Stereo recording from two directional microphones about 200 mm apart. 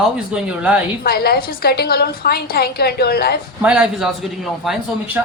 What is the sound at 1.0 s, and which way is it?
A woman's voice, 50° left (ahead or behind).